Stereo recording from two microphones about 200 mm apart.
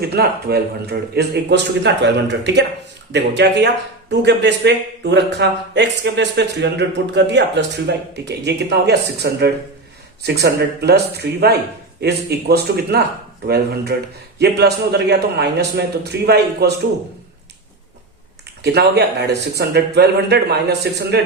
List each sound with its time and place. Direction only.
0.1 s a man's voice: 50° right (ahead or behind)
18.6 s a man's voice: 55° right (ahead or behind)